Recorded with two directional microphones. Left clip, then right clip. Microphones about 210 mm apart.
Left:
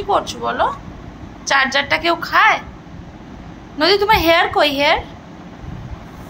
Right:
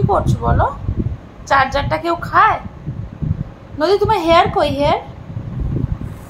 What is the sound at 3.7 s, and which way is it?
A woman's voice, 5° right (ahead or behind).